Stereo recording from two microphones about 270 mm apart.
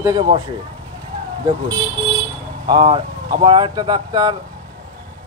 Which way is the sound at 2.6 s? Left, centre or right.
Centre.